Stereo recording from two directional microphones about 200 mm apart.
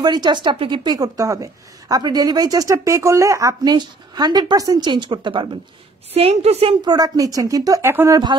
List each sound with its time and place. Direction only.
0.0 s a woman's voice: 20° right (ahead or behind)